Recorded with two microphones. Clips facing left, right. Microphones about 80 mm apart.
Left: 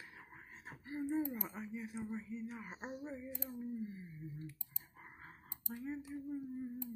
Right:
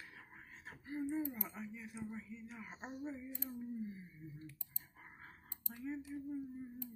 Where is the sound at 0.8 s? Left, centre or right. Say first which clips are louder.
Even; centre.